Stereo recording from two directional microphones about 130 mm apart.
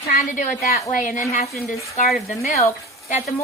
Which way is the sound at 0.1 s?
85° left.